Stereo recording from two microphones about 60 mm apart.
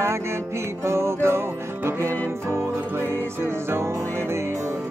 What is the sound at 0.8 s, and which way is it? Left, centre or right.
Music, right.